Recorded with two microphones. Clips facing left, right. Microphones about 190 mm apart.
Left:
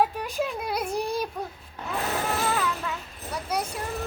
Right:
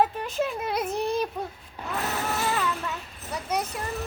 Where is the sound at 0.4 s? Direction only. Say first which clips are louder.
Right 1 dB; 10° left (ahead or behind).